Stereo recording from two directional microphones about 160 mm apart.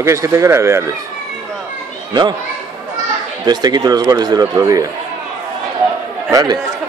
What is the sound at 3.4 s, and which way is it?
Speech, 25° right (ahead or behind).